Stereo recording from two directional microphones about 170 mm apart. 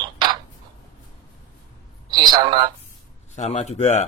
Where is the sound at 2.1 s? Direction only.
25° right (ahead or behind).